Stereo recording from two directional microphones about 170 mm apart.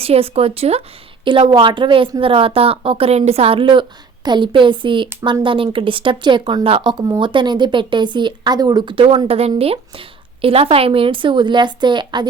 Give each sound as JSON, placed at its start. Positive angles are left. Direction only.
{"t": 0.0, "sound": "speech", "side_deg": -35}